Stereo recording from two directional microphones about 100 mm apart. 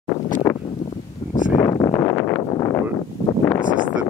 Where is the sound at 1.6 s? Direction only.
35° left (ahead or behind).